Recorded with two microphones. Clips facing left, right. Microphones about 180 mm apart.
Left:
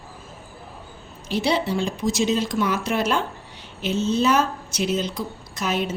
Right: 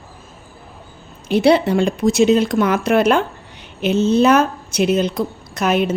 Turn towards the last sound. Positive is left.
turn(degrees=-65)  # may be behind; listen again after turning